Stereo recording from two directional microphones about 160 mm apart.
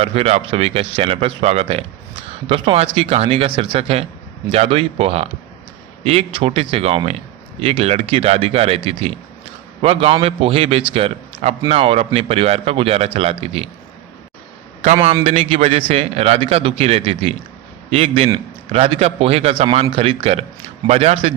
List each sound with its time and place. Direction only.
0.0 s a man's voice: 40° right (ahead or behind)
15.0 s a man's voice: 35° right (ahead or behind)